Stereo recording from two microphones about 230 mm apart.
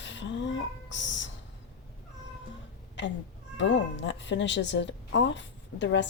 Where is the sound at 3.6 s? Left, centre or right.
Left.